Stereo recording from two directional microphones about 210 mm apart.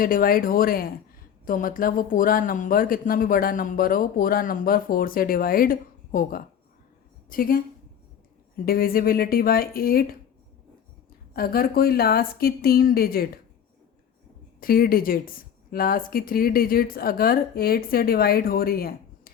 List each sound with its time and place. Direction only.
0.0 s speech: 45° left (ahead or behind)
8.6 s speech: 45° left (ahead or behind)
11.3 s speech: 45° left (ahead or behind)
14.6 s speech: 45° left (ahead or behind)